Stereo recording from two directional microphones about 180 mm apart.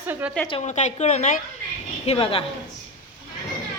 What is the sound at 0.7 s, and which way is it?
Speech, 40° left (ahead or behind).